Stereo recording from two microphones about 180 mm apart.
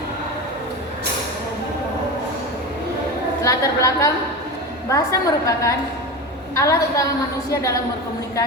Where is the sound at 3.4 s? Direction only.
20° left (ahead or behind).